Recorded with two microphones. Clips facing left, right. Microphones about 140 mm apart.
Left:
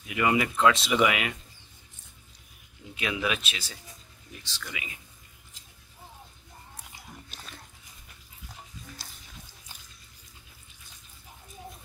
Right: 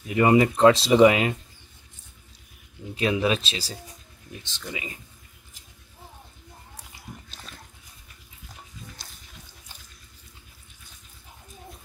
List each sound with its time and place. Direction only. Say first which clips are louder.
0.0 s speech: right 7 dB; 35° right (ahead or behind)
2.9 s speech: right 7 dB; 35° right (ahead or behind)
4.4 s speech: right 5 dB; 20° right (ahead or behind)